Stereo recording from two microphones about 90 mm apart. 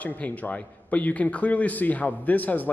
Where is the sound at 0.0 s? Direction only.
15° left (ahead or behind).